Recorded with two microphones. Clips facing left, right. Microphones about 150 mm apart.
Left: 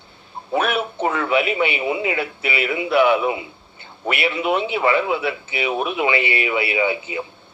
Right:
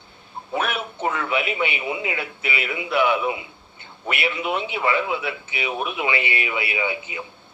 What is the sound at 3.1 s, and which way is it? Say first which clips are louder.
Speech: left 4 dB; 35° left (ahead or behind).